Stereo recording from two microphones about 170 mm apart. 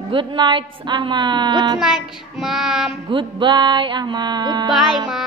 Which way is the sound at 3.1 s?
30° right (ahead or behind).